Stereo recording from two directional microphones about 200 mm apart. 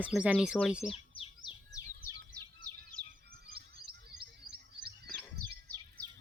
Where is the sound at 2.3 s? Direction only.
55° right (ahead or behind).